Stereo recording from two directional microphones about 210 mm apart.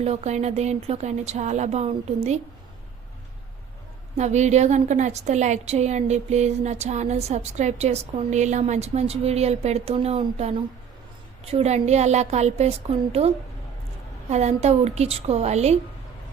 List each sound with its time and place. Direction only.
0.0 s a woman's voice: 30° right (ahead or behind)
4.2 s a woman's voice: 35° right (ahead or behind)